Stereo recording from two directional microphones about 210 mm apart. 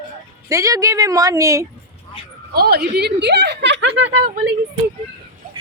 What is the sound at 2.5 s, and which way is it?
A woman's voice, 50° right (ahead or behind).